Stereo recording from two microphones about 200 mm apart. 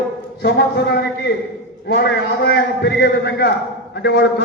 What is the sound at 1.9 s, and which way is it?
A man's voice, 55° left (ahead or behind).